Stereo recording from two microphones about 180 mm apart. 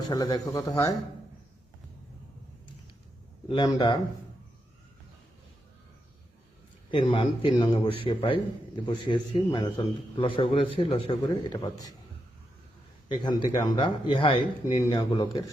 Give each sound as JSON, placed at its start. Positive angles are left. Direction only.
{"t": 0.1, "sound": "a man's voice", "side_deg": 25}
{"t": 3.5, "sound": "a man's voice", "side_deg": 25}
{"t": 6.9, "sound": "a man's voice", "side_deg": 30}
{"t": 13.1, "sound": "a man's voice", "side_deg": 25}